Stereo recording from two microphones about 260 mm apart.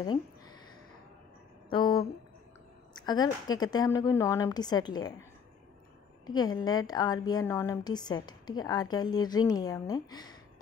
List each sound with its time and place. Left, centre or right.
1.7 s a sound: centre
2.9 s a woman's voice: centre
6.2 s a woman's voice: centre